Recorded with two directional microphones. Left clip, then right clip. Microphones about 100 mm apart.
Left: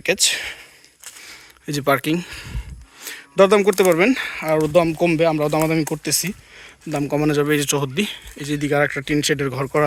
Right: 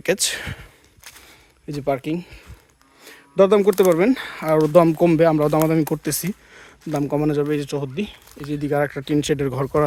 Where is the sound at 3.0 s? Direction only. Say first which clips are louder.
Left 9 dB; 10° right (ahead or behind).